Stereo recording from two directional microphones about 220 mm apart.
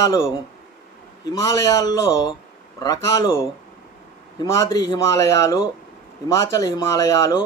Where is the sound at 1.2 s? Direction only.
15° left (ahead or behind).